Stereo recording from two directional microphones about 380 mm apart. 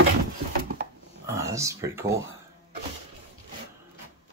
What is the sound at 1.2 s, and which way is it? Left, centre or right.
Speech, centre.